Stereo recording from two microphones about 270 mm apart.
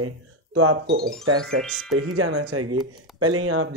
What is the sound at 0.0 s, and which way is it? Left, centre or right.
Speech, right.